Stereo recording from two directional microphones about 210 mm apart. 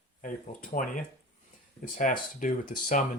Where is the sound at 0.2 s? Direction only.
40° left (ahead or behind).